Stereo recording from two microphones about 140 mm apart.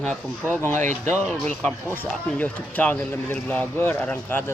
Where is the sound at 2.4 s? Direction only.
10° left (ahead or behind).